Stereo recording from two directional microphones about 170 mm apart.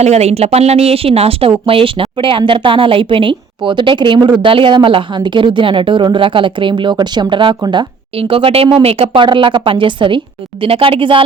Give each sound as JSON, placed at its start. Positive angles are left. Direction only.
{"t": 0.0, "sound": "speech", "side_deg": -40}